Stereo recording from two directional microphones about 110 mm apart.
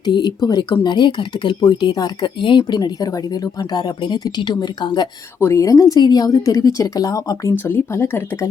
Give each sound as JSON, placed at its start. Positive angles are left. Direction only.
{"t": 0.0, "sound": "speech", "side_deg": 40}
{"t": 5.4, "sound": "speech", "side_deg": 25}
{"t": 7.6, "sound": "speech", "side_deg": 20}